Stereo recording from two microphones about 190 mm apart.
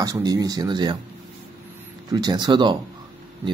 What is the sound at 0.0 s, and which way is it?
Speech, 20° right (ahead or behind).